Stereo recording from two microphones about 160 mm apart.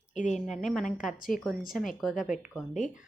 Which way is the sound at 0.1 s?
50° left (ahead or behind).